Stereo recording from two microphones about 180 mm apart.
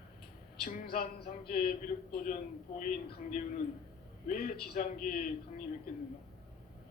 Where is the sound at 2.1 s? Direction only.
50° left (ahead or behind).